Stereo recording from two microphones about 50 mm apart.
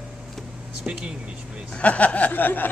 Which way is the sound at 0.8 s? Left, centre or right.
Right.